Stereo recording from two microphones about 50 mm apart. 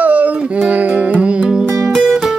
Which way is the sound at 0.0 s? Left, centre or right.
Right.